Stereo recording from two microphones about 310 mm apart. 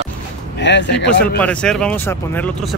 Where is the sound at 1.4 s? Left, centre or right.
Centre.